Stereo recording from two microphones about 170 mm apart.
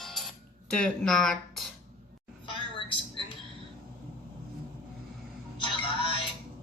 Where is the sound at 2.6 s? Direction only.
30° left (ahead or behind).